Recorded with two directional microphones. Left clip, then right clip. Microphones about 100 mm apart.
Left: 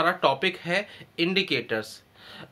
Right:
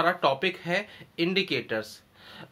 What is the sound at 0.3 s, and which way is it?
Speech, 15° left (ahead or behind).